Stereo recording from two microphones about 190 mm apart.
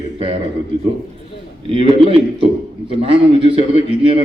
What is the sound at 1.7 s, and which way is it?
A man's voice, 30° right (ahead or behind).